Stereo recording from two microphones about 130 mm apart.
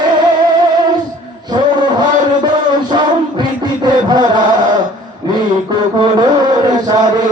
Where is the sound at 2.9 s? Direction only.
35° right (ahead or behind).